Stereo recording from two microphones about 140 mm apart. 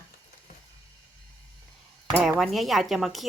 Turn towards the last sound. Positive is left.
turn(degrees=0)  # may be behind; listen again after turning